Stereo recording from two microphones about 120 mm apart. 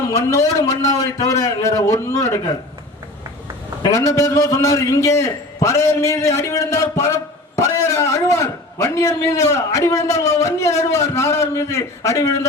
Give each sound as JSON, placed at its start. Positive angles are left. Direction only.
{"t": 0.1, "sound": "a man's voice", "side_deg": 25}
{"t": 3.8, "sound": "a man's voice", "side_deg": 25}